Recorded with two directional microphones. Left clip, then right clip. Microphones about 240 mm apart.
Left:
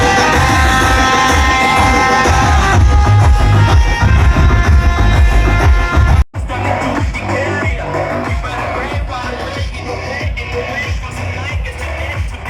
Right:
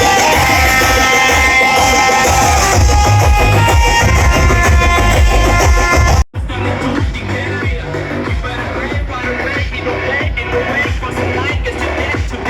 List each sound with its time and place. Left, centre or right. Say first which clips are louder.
0.2 s music: right 1 dB; right
6.7 s music: left 1 dB; centre
10.7 s music: right 5 dB; right